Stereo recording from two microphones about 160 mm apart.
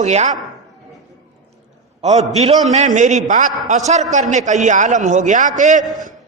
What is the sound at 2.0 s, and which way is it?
A woman's voice, 40° right (ahead or behind).